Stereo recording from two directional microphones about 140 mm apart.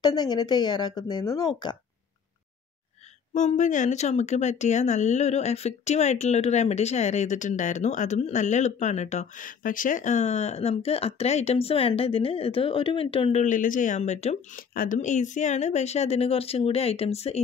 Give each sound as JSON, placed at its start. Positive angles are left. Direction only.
{"t": 0.0, "sound": "speech", "side_deg": 30}
{"t": 3.3, "sound": "speech", "side_deg": 55}
{"t": 9.6, "sound": "speech", "side_deg": 75}
{"t": 13.4, "sound": "speech", "side_deg": 70}
{"t": 14.7, "sound": "speech", "side_deg": 80}